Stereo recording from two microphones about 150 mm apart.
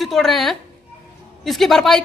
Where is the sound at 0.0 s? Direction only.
Centre (ahead or behind).